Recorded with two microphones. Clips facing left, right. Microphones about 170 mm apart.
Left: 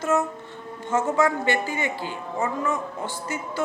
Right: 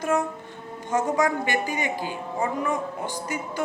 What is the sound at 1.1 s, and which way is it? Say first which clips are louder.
A man's voice: left 3 dB; 15° right (ahead or behind).